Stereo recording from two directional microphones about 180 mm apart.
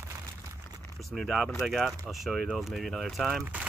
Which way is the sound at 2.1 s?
Centre (ahead or behind).